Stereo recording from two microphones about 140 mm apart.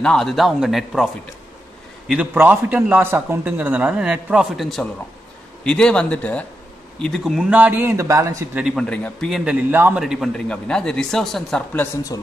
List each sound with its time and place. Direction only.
0.0 s speech: 5° left (ahead or behind)
2.3 s a man's voice: 10° right (ahead or behind)
8.5 s speech: 5° right (ahead or behind)
8.8 s speech: 10° left (ahead or behind)
9.3 s a man's voice: 5° right (ahead or behind)
10.0 s speech: centre (ahead or behind)
12.1 s speech: 25° left (ahead or behind)